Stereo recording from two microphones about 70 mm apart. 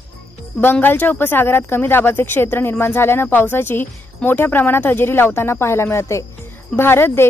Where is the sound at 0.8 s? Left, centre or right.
Left.